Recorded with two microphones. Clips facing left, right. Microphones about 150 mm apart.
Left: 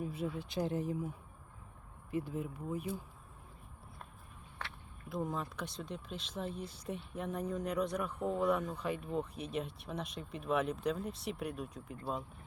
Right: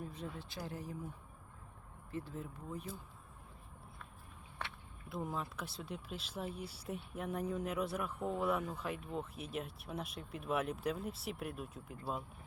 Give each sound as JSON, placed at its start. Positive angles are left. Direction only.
{"t": 0.0, "sound": "speech", "side_deg": 10}
{"t": 0.4, "sound": "speech", "side_deg": 20}
{"t": 5.0, "sound": "speech", "side_deg": 0}